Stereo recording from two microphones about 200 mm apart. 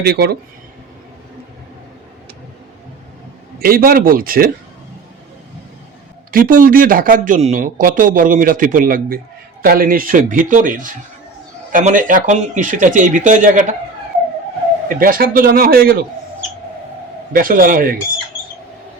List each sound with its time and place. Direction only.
0.0 s speech: 50° right (ahead or behind)
3.6 s speech: 50° right (ahead or behind)
6.3 s speech: 45° right (ahead or behind)
14.8 s speech: 45° right (ahead or behind)
17.3 s speech: 45° right (ahead or behind)